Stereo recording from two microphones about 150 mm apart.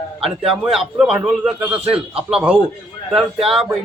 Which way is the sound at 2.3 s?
5° right (ahead or behind).